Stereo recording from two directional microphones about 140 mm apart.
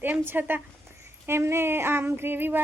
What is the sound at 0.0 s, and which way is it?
Speech, 15° right (ahead or behind).